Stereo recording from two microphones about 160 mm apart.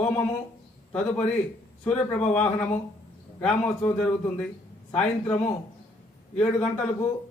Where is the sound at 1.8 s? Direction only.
10° left (ahead or behind).